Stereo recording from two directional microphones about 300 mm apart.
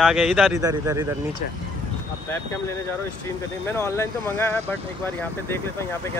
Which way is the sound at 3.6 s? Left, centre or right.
Centre.